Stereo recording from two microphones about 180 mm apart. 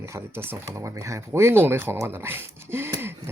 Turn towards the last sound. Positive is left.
turn(degrees=-15)  # may be behind; listen again after turning